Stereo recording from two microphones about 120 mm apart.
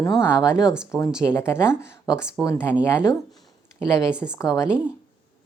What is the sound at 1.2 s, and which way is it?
Speech, 20° left (ahead or behind).